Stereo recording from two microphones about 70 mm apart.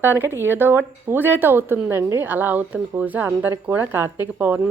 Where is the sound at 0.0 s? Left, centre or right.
Right.